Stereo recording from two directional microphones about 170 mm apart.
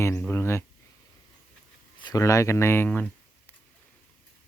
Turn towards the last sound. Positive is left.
turn(degrees=10)  # may be behind; listen again after turning